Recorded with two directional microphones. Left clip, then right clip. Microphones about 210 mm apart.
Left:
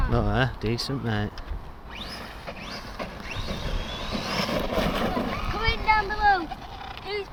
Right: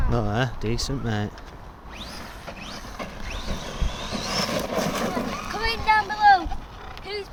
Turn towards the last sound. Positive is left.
turn(degrees=-5)  # may be behind; listen again after turning